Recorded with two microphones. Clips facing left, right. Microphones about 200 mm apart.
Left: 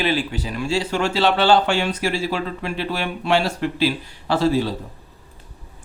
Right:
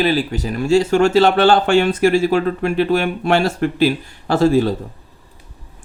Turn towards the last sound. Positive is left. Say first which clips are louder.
# right 5 dB
turn(degrees=-50)  # may be behind; listen again after turning